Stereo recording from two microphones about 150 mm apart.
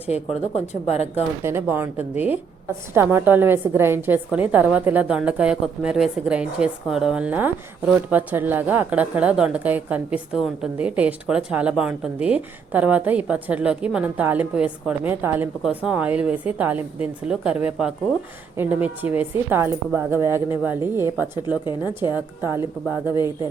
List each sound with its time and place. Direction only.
0.1 s speech: 45° left (ahead or behind)
1.4 s a woman's voice: 15° right (ahead or behind)